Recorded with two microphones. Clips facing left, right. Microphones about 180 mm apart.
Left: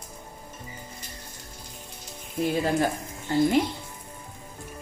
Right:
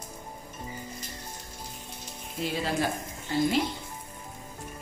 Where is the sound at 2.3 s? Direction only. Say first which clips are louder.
Left 5 dB; 55° left (ahead or behind).